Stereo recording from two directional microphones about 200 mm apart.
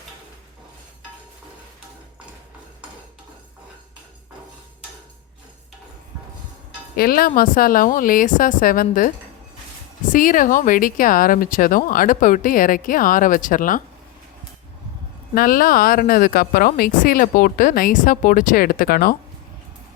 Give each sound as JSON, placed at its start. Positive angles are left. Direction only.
{"t": 6.9, "sound": "speech", "side_deg": 50}
{"t": 15.4, "sound": "speech", "side_deg": 45}